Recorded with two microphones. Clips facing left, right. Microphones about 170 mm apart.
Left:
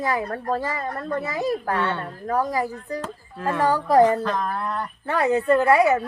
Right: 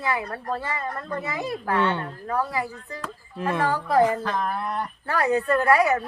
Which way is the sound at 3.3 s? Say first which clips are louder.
Left 1 dB; 20° right (ahead or behind).